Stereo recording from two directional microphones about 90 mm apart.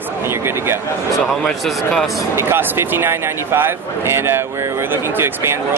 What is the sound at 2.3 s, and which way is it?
Speech, 25° right (ahead or behind).